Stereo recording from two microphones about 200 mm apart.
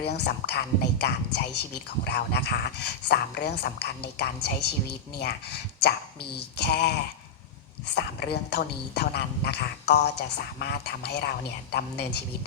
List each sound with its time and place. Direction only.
0.0 s speech: 55° left (ahead or behind)